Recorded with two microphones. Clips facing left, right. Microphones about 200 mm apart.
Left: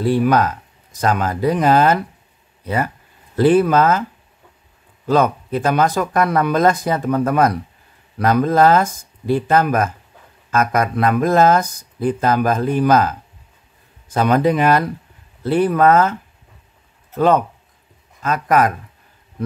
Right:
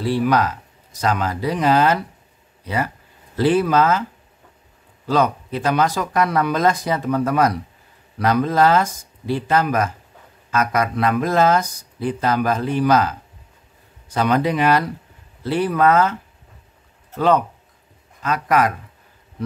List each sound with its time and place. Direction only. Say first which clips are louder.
0.0 s speech: left 3 dB; 50° left (ahead or behind)
5.0 s a man's voice: left 3 dB; 50° left (ahead or behind)